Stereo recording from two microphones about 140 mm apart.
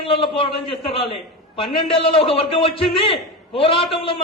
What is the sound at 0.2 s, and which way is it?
A man's voice, 40° left (ahead or behind).